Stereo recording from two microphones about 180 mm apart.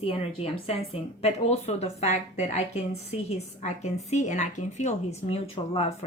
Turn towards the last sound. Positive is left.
turn(degrees=35)  # may be behind; listen again after turning